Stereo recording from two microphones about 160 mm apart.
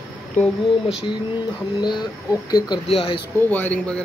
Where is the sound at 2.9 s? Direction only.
35° left (ahead or behind).